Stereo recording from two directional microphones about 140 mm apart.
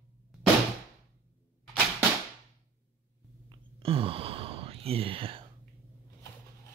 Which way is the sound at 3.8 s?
40° right (ahead or behind).